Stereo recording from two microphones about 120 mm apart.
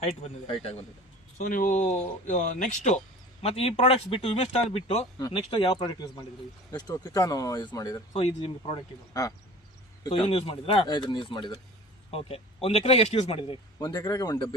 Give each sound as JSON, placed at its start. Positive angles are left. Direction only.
{"t": 0.4, "sound": "speech", "side_deg": 50}
{"t": 1.4, "sound": "speech", "side_deg": 90}
{"t": 3.4, "sound": "speech", "side_deg": 60}
{"t": 5.3, "sound": "speech", "side_deg": 50}
{"t": 8.1, "sound": "speech", "side_deg": 50}
{"t": 10.1, "sound": "speech", "side_deg": 50}
{"t": 10.8, "sound": "speech", "side_deg": 40}
{"t": 12.1, "sound": "speech", "side_deg": 55}
{"t": 13.7, "sound": "speech", "side_deg": 25}